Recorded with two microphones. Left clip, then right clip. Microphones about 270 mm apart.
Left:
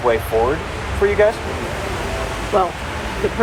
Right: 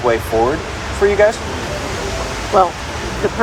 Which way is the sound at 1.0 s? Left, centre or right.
Right.